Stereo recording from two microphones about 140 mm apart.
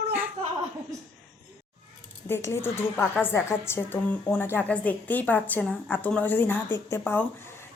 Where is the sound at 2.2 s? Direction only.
15° left (ahead or behind).